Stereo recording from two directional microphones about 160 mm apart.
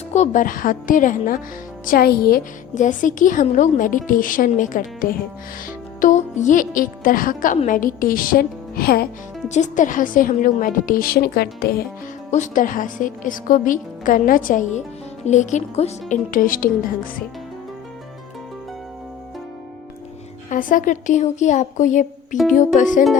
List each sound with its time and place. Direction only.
0.1 s a woman's voice: 50° left (ahead or behind)
1.8 s a woman's voice: 65° left (ahead or behind)
6.0 s a woman's voice: 50° left (ahead or behind); by 9.0 s 70° left (ahead or behind)
9.5 s a woman's voice: 50° left (ahead or behind); by 11.9 s 75° left (ahead or behind)
12.3 s a woman's voice: 55° left (ahead or behind)
16.3 s a woman's voice: 60° left (ahead or behind)
20.5 s a woman's voice: 60° left (ahead or behind)